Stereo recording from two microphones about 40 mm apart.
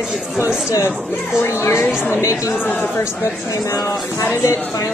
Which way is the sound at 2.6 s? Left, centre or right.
Left.